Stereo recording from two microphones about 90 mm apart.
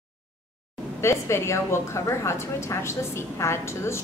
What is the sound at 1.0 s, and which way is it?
A woman's voice, 30° left (ahead or behind).